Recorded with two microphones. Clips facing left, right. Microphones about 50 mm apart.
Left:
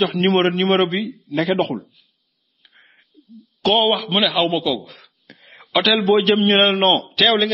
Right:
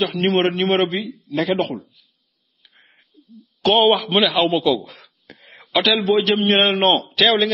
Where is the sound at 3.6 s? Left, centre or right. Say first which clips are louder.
Right 2 dB; centre.